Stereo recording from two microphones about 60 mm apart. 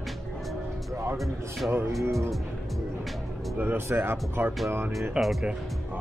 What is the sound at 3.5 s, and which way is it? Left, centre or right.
Speech, right.